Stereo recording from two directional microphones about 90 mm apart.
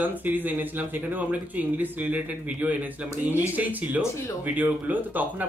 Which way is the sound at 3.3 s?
20° right (ahead or behind).